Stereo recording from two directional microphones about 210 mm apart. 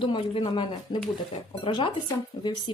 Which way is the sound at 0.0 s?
25° left (ahead or behind).